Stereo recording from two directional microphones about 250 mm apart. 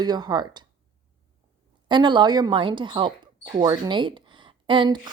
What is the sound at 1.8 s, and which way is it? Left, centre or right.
A woman's voice, centre.